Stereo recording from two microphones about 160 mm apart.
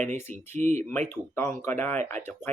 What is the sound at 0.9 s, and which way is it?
Speech, 15° left (ahead or behind).